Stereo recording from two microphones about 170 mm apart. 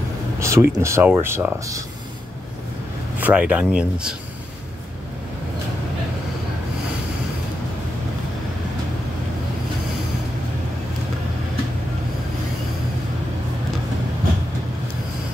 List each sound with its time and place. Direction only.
0.4 s speech: 15° right (ahead or behind)
3.2 s speech: 10° right (ahead or behind)